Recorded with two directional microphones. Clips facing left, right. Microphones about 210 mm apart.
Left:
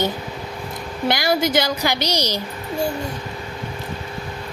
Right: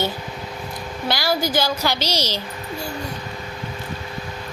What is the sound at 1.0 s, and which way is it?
A woman's voice, 20° left (ahead or behind).